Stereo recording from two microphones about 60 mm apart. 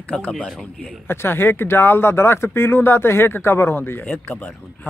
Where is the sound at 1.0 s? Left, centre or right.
Left.